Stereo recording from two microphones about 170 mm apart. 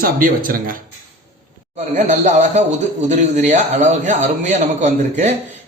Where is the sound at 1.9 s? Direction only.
45° right (ahead or behind).